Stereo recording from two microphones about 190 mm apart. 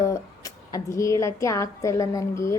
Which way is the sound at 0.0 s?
15° left (ahead or behind).